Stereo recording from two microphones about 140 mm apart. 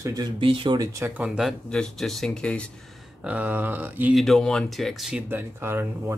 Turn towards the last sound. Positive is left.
turn(degrees=-15)  # may be behind; listen again after turning